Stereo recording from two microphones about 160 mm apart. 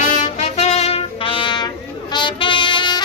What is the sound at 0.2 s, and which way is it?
Music, 45° left (ahead or behind).